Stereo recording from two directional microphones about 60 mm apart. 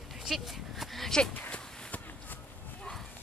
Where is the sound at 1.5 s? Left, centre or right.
Left.